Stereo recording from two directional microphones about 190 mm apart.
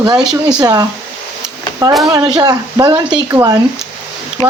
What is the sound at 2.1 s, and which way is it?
Speech, 20° right (ahead or behind).